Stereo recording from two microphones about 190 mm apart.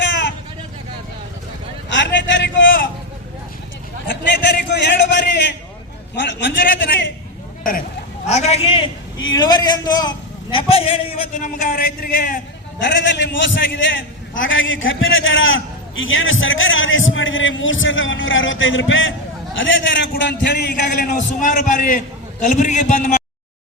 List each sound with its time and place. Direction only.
0.0 s vehicle: 75° left (ahead or behind)
1.9 s a sound: 75° left (ahead or behind)
4.1 s a man's voice: 65° left (ahead or behind)
7.6 s a sound: 45° left (ahead or behind)
8.4 s a man's voice: 35° left (ahead or behind)
12.8 s a man's voice: 70° left (ahead or behind); by 23.2 s 40° left (ahead or behind)